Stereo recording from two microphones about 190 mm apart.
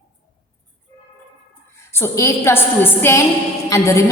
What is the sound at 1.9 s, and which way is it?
A woman's voice, 15° left (ahead or behind).